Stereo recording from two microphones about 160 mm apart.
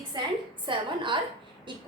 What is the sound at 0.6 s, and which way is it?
A woman's voice, 30° right (ahead or behind).